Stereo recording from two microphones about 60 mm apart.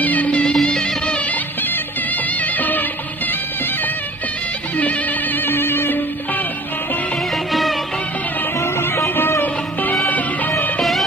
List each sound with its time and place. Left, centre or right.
0.0 s music: left
2.4 s music: left
4.7 s music: left
8.5 s music: left
10.8 s music: centre